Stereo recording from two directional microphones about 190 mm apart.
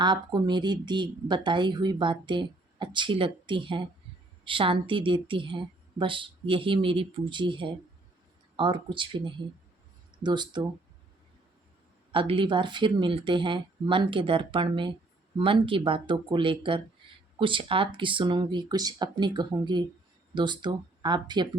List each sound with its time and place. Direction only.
0.0 s speech: 25° right (ahead or behind)
12.1 s speech: 25° right (ahead or behind)